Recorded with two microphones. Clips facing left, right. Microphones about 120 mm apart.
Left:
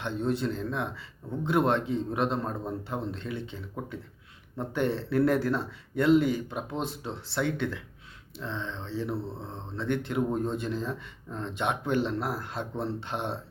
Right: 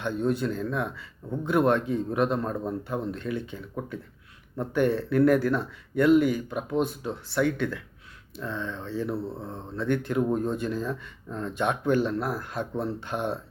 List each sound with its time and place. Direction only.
0.0 s speech: 25° left (ahead or behind)